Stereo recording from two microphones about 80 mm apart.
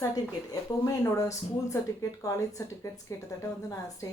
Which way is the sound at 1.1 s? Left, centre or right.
Left.